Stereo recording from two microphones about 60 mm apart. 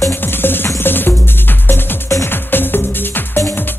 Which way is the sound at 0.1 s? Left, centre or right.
Left.